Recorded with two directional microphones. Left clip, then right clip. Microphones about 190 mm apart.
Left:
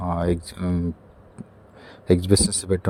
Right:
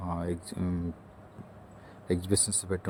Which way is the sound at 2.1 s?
35° left (ahead or behind).